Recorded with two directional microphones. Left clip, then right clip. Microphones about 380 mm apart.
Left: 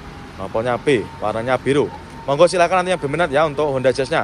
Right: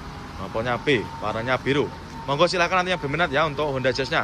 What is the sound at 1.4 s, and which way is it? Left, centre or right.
Speech, centre.